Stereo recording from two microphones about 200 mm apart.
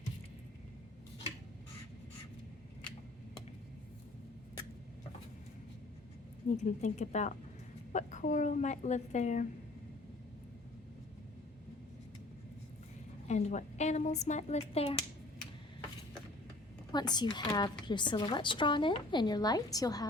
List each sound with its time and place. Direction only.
6.6 s speech: 35° left (ahead or behind)
13.2 s speech: 35° left (ahead or behind)
16.9 s a woman's voice: 20° left (ahead or behind)